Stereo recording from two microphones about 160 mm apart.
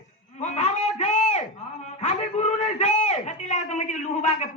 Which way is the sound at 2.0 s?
45° left (ahead or behind).